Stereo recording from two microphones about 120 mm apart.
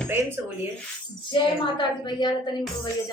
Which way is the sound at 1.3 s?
40° left (ahead or behind).